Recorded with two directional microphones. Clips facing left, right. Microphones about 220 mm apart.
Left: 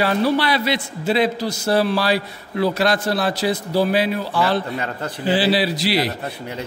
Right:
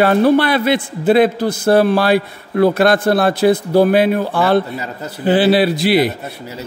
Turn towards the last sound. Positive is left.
turn(degrees=-5)  # may be behind; listen again after turning